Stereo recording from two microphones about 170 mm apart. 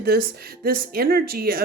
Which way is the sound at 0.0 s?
60° right (ahead or behind).